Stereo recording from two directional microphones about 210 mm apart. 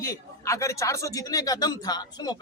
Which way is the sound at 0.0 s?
15° left (ahead or behind).